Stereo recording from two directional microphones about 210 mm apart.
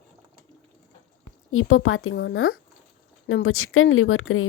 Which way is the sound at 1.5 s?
80° left.